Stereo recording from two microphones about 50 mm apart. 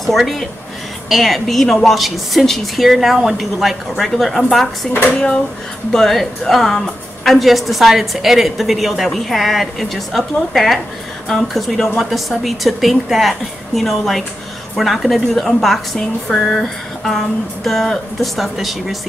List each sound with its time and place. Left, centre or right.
0.0 s a woman's voice: centre